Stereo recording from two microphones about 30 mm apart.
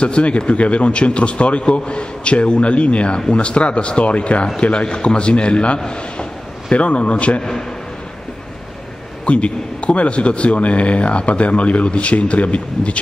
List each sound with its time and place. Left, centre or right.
0.0 s a man's voice: left
4.7 s a man's voice: left
9.2 s a man's voice: left